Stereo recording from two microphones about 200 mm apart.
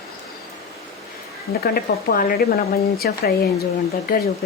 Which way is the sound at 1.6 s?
50° left (ahead or behind).